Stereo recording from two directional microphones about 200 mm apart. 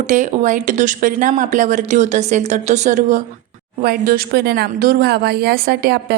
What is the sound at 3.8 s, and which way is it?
Speech, 50° right (ahead or behind).